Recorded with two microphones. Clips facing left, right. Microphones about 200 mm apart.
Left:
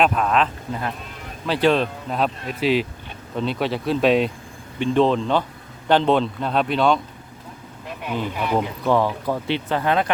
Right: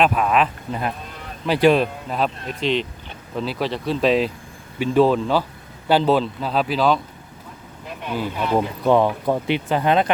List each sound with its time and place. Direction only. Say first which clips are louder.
0.0 s speech: right 1 dB; 5° right (ahead or behind)
1.5 s speech: right 3 dB; 10° right (ahead or behind)
7.9 s a sound: even; 5° right (ahead or behind)
8.5 s speech: right 3 dB; 20° right (ahead or behind)